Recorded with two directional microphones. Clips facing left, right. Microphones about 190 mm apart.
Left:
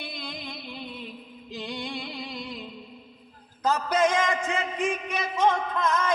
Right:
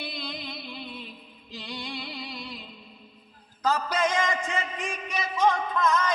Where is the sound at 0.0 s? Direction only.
50° left (ahead or behind).